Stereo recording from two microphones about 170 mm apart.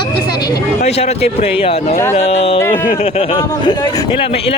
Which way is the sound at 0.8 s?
35° left (ahead or behind).